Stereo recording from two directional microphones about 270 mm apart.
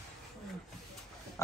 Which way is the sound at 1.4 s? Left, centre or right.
Centre.